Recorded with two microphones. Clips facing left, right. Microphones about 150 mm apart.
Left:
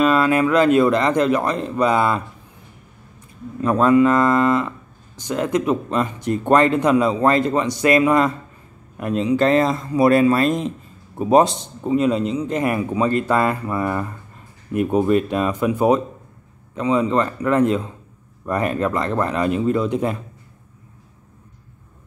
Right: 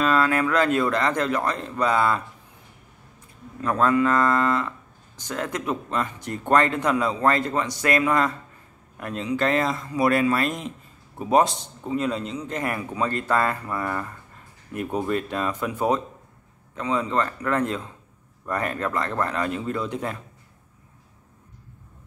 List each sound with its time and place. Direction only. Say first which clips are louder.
0.0 s a man's voice: left 5 dB; 15° left (ahead or behind)
3.6 s a man's voice: left 6 dB; 20° left (ahead or behind)